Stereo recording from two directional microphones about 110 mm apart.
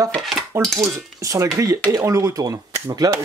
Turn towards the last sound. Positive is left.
turn(degrees=-30)  # may be behind; listen again after turning